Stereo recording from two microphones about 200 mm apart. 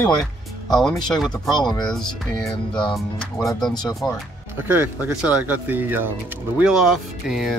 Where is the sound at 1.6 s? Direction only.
20° left (ahead or behind).